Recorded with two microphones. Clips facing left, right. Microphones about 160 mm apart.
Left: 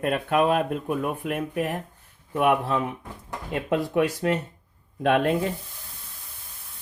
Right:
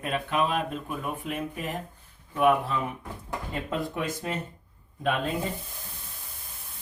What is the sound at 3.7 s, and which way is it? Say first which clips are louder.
Speech: left 9 dB; 75° left (ahead or behind).